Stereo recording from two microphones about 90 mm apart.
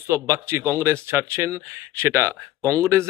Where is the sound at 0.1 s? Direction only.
30° right (ahead or behind).